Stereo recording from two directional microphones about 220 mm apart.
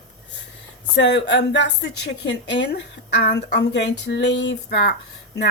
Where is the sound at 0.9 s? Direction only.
50° left (ahead or behind).